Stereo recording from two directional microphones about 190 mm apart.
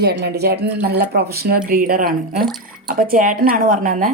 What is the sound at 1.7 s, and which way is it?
Speech, 45° right (ahead or behind).